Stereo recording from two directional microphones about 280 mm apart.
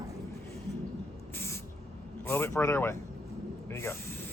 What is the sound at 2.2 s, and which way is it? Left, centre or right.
Speech, centre.